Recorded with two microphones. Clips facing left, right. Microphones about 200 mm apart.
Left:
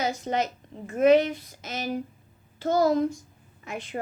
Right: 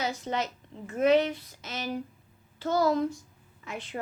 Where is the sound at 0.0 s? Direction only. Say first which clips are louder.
Left 4 dB; 45° left (ahead or behind).